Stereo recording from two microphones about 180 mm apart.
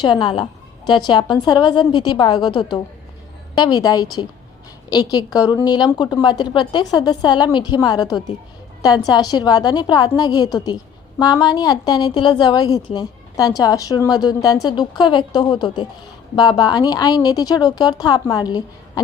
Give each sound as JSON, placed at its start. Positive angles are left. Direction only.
{"t": 0.0, "sound": "a woman's voice", "side_deg": 25}